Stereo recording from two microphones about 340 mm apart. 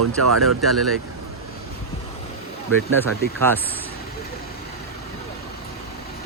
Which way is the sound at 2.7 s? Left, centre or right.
Right.